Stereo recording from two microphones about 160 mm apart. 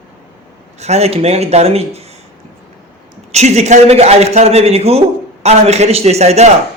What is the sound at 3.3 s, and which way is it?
A man's voice, 45° right (ahead or behind).